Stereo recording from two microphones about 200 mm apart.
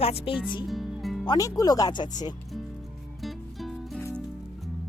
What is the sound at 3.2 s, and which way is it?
Music, centre (ahead or behind).